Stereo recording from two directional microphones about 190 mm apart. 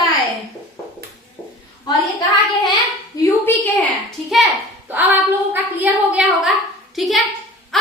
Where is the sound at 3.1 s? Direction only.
20° left (ahead or behind).